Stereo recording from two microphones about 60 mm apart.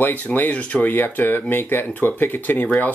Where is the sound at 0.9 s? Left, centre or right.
Left.